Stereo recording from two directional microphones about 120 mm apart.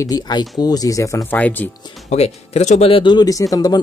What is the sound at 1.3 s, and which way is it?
Speech, 15° left (ahead or behind).